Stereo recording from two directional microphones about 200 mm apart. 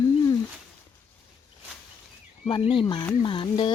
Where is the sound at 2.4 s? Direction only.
25° left (ahead or behind).